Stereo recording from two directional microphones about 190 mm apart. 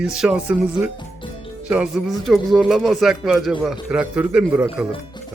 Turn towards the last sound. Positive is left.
turn(degrees=-5)  # may be behind; listen again after turning